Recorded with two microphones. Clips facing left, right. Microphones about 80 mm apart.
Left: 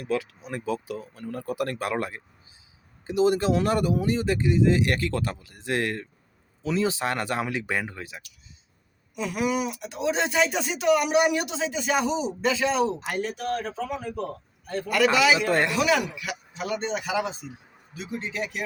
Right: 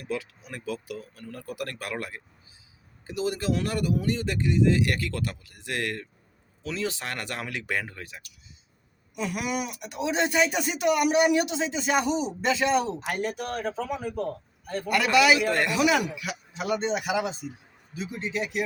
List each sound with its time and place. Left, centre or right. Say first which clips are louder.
0.4 s speech: left 4 dB; left
9.1 s speech: left 3 dB; centre
15.4 s speech: left 2 dB; left
15.7 s speech: even; centre
16.1 s speech: even; centre